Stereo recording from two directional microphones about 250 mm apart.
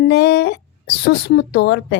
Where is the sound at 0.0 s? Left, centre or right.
Left.